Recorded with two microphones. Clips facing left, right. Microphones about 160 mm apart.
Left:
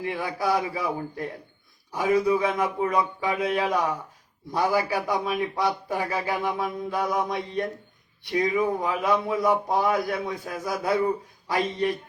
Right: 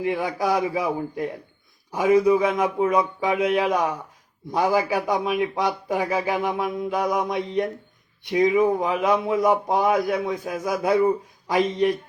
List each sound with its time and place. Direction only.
0.0 s a man's voice: 20° right (ahead or behind)